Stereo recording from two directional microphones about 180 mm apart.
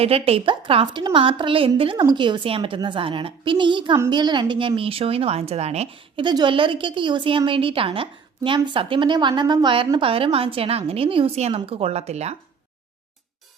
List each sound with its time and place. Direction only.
0.0 s a woman's voice: 35° right (ahead or behind)